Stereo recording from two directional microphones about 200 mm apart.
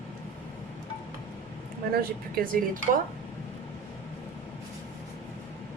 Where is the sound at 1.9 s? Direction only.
45° right (ahead or behind).